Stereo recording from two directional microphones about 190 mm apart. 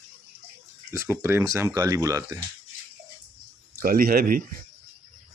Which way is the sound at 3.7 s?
50° right (ahead or behind).